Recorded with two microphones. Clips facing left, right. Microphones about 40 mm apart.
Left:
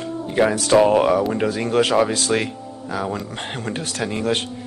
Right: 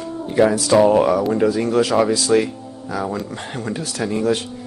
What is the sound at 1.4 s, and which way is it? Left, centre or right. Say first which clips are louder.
Speech: right 2 dB; left.